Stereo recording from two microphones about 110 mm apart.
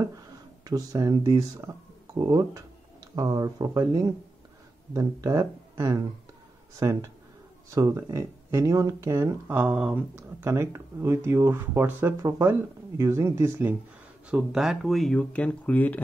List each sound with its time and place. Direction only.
0.7 s speech: 35° right (ahead or behind)
9.6 s speech: 10° right (ahead or behind)
10.1 s speech: 25° right (ahead or behind)
14.3 s speech: 5° right (ahead or behind); by 16.0 s 15° left (ahead or behind)